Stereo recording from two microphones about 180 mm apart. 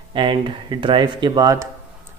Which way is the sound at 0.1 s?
25° right (ahead or behind).